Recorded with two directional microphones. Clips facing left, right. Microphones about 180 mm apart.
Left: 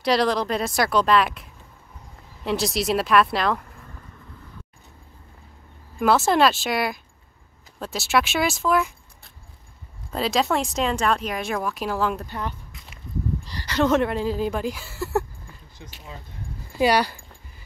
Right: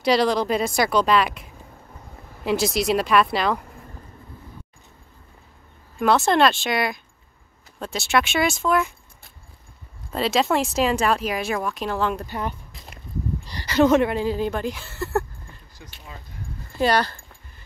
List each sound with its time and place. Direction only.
0.0 s speech: centre (ahead or behind)
5.9 s speech: 5° left (ahead or behind)
10.1 s speech: centre (ahead or behind)
12.3 s speech: 15° right (ahead or behind)
12.7 s a sound: 35° right (ahead or behind)
13.5 s speech: 10° right (ahead or behind); by 15.2 s 5° left (ahead or behind)
16.7 s a sound: 10° left (ahead or behind)